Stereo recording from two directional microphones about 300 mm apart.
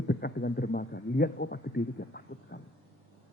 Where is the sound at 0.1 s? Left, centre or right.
Left.